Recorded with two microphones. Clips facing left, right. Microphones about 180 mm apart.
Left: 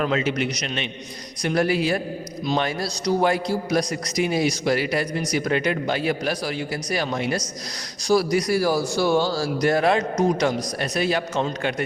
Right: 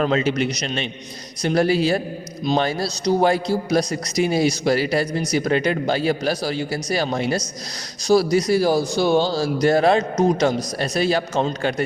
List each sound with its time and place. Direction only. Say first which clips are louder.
0.0 s a man's voice: right 3 dB; 30° right (ahead or behind)